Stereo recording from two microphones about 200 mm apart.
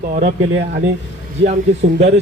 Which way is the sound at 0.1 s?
35° right (ahead or behind).